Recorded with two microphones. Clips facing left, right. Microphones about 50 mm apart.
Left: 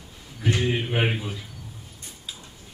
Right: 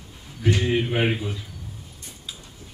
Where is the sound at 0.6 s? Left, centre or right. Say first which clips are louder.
Right 2 dB; centre.